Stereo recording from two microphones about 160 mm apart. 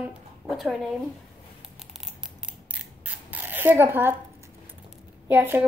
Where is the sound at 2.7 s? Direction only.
10° right (ahead or behind).